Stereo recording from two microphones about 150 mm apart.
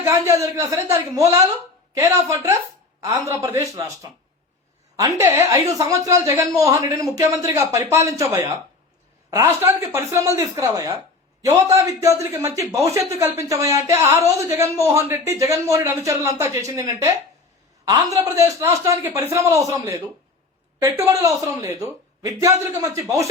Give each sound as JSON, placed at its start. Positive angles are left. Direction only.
{"t": 0.0, "sound": "speech", "side_deg": -20}